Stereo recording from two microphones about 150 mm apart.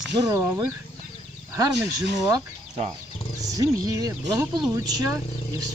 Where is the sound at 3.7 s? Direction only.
25° right (ahead or behind).